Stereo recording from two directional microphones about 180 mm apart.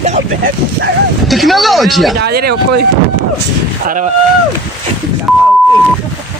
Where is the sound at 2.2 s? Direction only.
60° right (ahead or behind).